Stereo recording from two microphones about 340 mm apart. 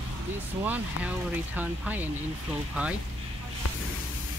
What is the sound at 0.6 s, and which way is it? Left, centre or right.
Speech, centre.